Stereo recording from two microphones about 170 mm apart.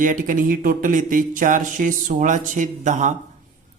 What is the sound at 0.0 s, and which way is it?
Speech, 50° right (ahead or behind).